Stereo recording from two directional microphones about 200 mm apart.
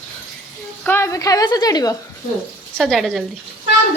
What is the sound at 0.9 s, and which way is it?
A woman's voice, 15° left (ahead or behind).